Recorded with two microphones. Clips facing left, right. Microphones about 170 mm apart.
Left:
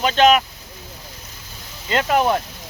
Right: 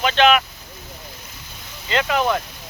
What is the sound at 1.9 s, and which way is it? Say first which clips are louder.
Speech: left 2 dB; 40° left (ahead or behind).